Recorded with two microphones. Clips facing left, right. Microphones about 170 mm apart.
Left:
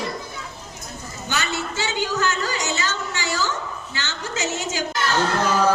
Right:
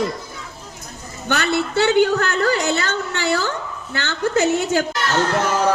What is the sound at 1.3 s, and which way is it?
A woman's voice, 60° right (ahead or behind).